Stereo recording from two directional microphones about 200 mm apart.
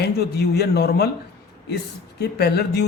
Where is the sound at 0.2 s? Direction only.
55° left (ahead or behind).